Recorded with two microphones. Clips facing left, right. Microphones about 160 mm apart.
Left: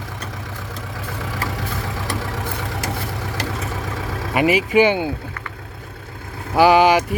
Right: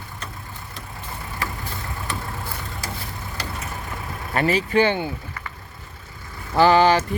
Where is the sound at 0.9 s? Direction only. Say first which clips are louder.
Left 3 dB; 90° left.